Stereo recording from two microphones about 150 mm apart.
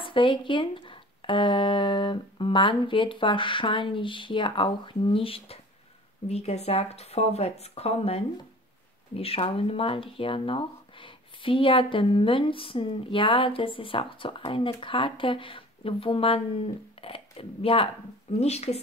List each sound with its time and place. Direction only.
0.0 s speech: 35° left (ahead or behind)